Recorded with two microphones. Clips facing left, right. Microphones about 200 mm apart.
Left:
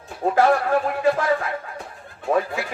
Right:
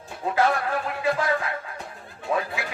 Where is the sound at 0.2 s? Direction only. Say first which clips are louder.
Left 6 dB; 50° left (ahead or behind).